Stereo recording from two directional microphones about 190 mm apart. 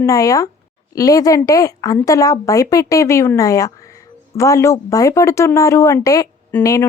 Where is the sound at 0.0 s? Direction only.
15° left (ahead or behind).